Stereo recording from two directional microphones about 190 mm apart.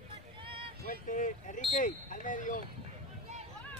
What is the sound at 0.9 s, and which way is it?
Speech, 45° left (ahead or behind).